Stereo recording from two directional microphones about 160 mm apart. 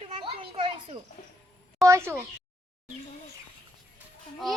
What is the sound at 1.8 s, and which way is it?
Speech, 20° right (ahead or behind).